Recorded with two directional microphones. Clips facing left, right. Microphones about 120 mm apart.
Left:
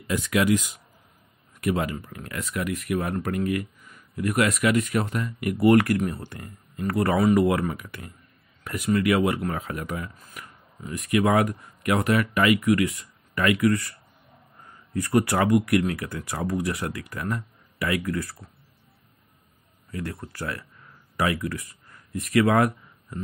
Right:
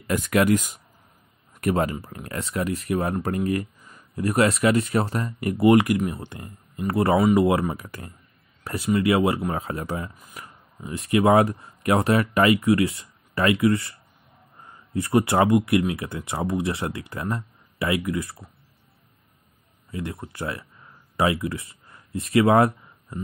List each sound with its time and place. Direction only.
0.0 s speech: 50° right (ahead or behind); by 5.7 s 30° right (ahead or behind)
5.7 s speech: 20° right (ahead or behind)
7.7 s speech: 35° right (ahead or behind)
15.0 s speech: 25° right (ahead or behind)
19.9 s speech: 20° right (ahead or behind)